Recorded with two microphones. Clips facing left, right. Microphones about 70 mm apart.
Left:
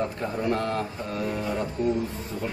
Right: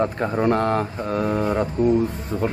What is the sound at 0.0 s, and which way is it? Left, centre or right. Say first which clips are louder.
Speech: right 7 dB; right.